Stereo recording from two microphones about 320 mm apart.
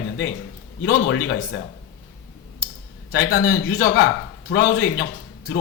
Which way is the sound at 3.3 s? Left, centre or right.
Left.